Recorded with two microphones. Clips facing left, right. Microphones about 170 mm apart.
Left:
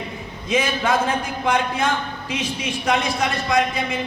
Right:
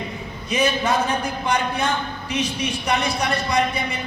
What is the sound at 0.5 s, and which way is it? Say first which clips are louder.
A man's voice: even; 90° left.